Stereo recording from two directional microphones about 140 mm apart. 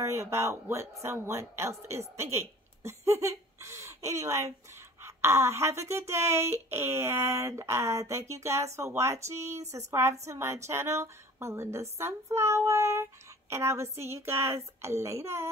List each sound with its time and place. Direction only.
0.0 s speech: 20° right (ahead or behind)